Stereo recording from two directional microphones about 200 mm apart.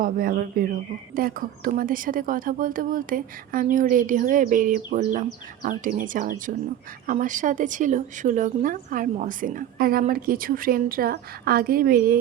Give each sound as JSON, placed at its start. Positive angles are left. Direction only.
{"t": 0.0, "sound": "speech", "side_deg": -45}